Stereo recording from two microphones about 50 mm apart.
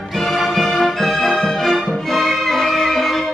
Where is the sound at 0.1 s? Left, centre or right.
Centre.